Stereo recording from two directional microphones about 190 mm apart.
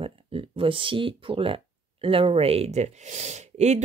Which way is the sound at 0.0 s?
30° right (ahead or behind).